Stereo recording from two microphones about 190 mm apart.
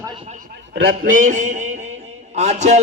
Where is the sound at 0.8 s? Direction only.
45° right (ahead or behind).